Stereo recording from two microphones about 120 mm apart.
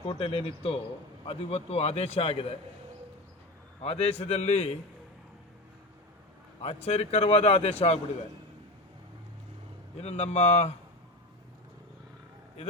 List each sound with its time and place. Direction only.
0.1 s a man's voice: 50° left (ahead or behind)
3.8 s a man's voice: 55° left (ahead or behind)
6.6 s a man's voice: 55° left (ahead or behind)
10.0 s a man's voice: 60° left (ahead or behind)